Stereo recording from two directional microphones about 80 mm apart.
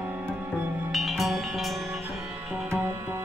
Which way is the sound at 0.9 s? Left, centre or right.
Centre.